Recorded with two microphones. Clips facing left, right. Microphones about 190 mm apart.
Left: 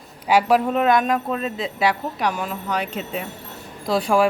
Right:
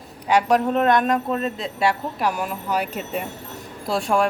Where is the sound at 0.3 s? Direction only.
5° left (ahead or behind).